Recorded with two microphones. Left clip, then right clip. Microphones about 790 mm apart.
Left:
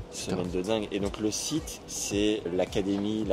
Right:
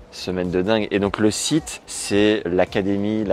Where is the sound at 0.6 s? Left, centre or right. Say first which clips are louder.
Right 11 dB; right.